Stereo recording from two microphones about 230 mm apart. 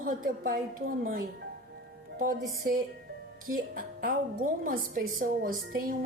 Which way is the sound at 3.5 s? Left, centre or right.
Right.